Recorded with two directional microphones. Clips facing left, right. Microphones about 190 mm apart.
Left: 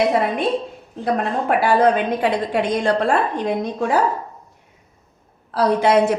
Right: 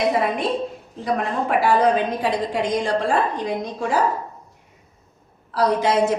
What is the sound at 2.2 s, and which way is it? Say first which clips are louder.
A woman's voice: left 3 dB; 60° left (ahead or behind).